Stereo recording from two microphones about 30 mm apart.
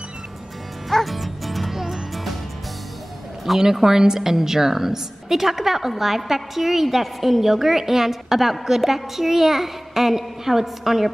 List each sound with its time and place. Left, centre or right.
0.8 s music: centre
3.5 s a woman's voice: centre
3.8 s a woman's voice: centre